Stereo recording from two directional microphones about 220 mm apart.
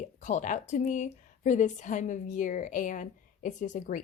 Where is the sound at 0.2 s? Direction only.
35° left (ahead or behind).